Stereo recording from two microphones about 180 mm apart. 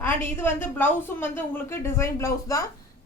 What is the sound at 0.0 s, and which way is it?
A woman's voice, 10° left (ahead or behind).